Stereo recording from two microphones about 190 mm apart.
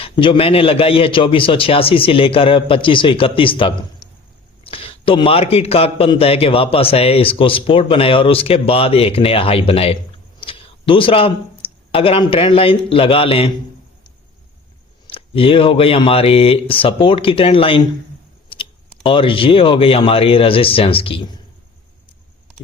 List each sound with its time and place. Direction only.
0.0 s a man's voice: 30° left (ahead or behind)
15.0 s a man's voice: 30° left (ahead or behind)
18.4 s a sound: 30° left (ahead or behind)
19.0 s a man's voice: 30° left (ahead or behind)